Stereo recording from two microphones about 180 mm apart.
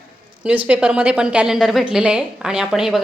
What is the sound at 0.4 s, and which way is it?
A woman's voice, 5° right (ahead or behind).